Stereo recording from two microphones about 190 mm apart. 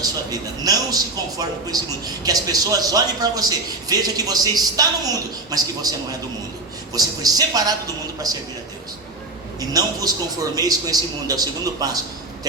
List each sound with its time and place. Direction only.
0.3 s a man's voice: 20° right (ahead or behind)
6.9 s a man's voice: 20° right (ahead or behind)
9.6 s a man's voice: 20° right (ahead or behind)